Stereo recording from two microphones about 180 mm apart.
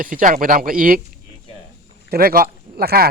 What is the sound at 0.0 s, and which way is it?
Speech, 50° right (ahead or behind).